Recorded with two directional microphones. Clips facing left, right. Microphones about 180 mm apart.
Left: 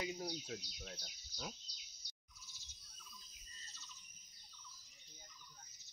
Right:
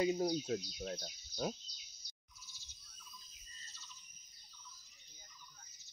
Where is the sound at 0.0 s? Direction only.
40° right (ahead or behind).